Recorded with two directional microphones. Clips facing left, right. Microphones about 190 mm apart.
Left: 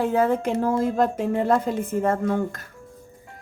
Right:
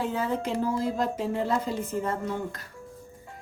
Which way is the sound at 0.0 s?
55° left (ahead or behind).